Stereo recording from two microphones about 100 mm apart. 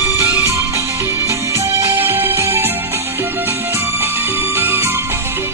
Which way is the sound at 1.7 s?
25° right (ahead or behind).